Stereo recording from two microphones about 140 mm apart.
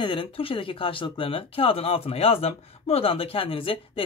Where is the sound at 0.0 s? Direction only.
40° left (ahead or behind).